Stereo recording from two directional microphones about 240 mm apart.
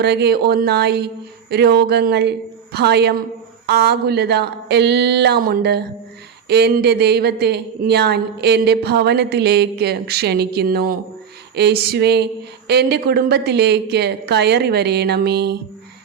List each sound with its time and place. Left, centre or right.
0.0 s speech: right